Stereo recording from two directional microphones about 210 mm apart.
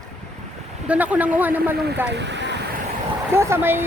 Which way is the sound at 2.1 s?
55° right (ahead or behind).